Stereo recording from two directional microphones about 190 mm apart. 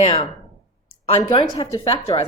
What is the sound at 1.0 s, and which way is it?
Speech, 30° left (ahead or behind).